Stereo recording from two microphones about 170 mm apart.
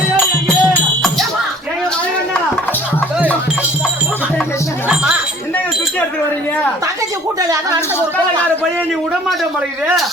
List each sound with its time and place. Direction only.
0.4 s music: 5° left (ahead or behind)
7.4 s speech: 20° right (ahead or behind)